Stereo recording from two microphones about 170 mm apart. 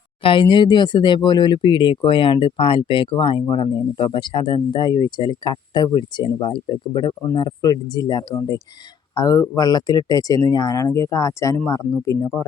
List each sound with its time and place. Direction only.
0.2 s speech: 30° left (ahead or behind)